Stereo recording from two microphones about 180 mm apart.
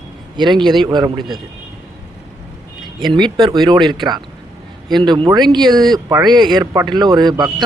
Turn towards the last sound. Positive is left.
turn(degrees=-25)  # may be behind; listen again after turning